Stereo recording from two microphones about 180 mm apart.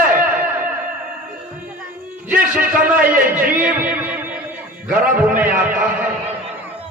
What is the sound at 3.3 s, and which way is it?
Music, 10° right (ahead or behind).